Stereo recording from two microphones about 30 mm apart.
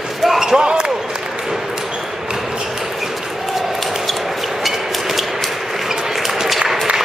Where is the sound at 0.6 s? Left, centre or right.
Right.